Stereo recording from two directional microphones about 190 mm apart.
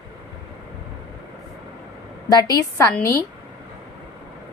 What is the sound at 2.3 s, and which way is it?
Speech, 20° left (ahead or behind).